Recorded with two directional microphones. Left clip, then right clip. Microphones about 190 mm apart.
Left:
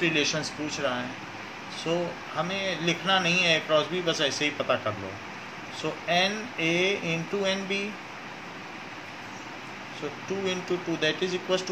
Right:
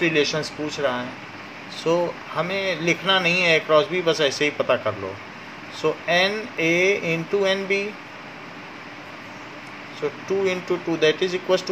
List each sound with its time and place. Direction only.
0.0 s speech: 40° right (ahead or behind)
5.8 s speech: 45° right (ahead or behind)
10.4 s speech: 45° right (ahead or behind)